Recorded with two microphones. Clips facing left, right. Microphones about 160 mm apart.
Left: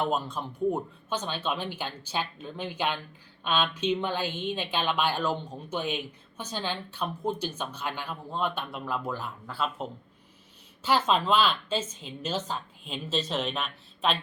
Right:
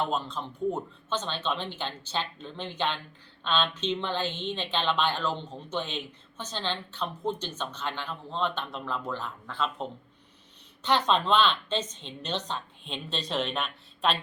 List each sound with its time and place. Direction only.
0.1 s speech: 10° left (ahead or behind)